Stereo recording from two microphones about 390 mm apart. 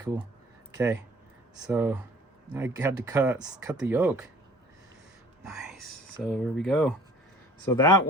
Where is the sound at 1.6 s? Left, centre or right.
Centre.